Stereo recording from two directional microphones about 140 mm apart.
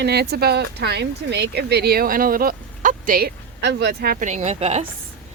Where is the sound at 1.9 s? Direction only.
90° right; by 4.9 s 50° right (ahead or behind).